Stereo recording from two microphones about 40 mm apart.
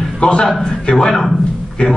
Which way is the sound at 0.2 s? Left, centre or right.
Left.